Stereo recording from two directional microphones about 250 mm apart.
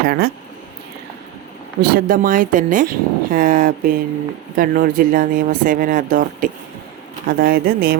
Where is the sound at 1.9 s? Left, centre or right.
Right.